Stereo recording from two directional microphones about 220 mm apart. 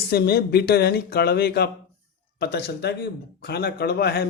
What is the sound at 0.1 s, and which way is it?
Speech, 45° left (ahead or behind).